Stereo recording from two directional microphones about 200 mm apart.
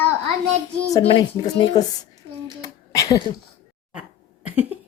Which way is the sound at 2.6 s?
15° left (ahead or behind).